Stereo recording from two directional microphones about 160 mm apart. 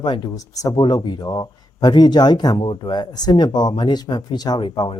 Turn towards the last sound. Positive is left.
turn(degrees=30)  # may be behind; listen again after turning